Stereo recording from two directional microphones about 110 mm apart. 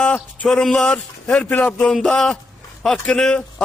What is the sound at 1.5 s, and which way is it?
Speech, 20° left (ahead or behind).